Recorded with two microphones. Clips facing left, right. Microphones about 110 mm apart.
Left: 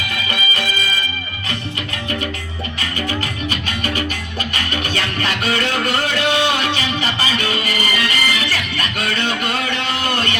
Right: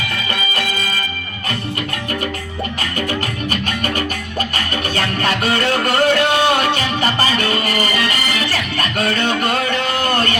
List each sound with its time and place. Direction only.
3.5 s music: 45° right (ahead or behind)